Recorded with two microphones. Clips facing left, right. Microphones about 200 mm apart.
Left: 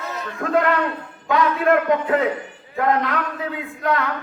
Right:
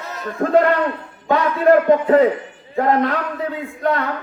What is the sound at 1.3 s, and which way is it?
A man's voice, 35° right (ahead or behind).